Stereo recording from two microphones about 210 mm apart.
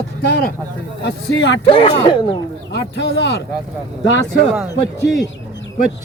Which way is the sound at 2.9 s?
55° left (ahead or behind).